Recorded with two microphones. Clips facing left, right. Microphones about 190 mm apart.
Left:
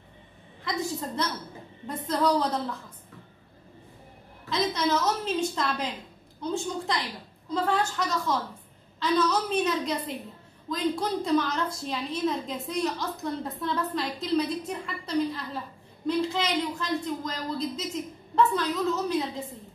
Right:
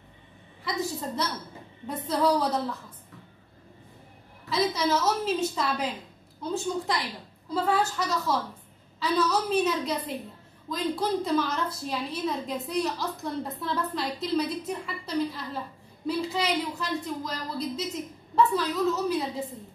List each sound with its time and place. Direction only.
0.6 s a woman's voice: centre (ahead or behind)
4.5 s a woman's voice: centre (ahead or behind)